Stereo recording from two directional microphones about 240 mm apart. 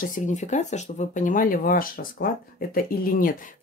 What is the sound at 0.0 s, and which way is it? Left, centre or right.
Speech, left.